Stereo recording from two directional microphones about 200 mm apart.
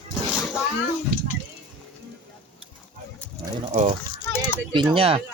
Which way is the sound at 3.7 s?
40° right (ahead or behind).